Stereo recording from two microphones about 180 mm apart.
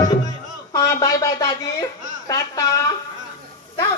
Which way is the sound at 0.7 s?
20° left (ahead or behind).